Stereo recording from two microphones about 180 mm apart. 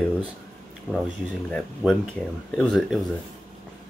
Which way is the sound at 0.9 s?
5° left (ahead or behind).